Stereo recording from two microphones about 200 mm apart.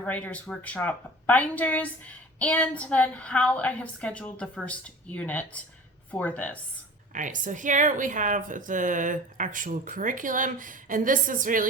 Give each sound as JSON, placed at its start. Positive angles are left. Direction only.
{"t": 0.0, "sound": "a woman's voice", "side_deg": 5}
{"t": 7.1, "sound": "speech", "side_deg": -40}